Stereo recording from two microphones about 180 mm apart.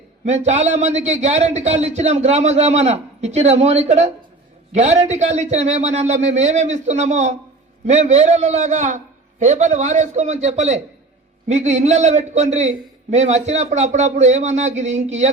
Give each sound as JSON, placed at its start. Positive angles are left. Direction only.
{"t": 0.4, "sound": "a man's voice", "side_deg": -40}